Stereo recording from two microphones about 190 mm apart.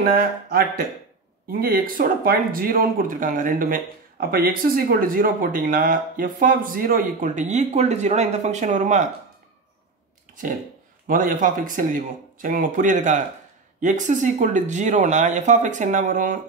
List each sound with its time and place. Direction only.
0.0 s speech: 50° right (ahead or behind)
11.1 s speech: 45° right (ahead or behind)